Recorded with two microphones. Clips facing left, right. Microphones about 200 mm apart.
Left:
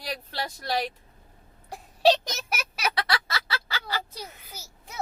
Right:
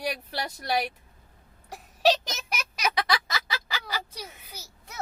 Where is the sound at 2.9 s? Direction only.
15° right (ahead or behind).